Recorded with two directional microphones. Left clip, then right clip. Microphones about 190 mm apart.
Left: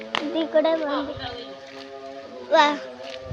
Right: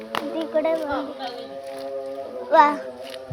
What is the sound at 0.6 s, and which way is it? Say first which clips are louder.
Speech: left 2 dB; 30° left (ahead or behind).